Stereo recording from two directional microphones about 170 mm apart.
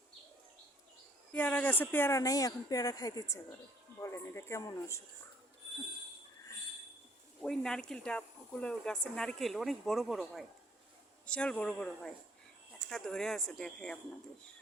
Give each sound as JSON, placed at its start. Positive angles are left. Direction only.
{"t": 1.3, "sound": "speech", "side_deg": 10}
{"t": 7.4, "sound": "speech", "side_deg": 5}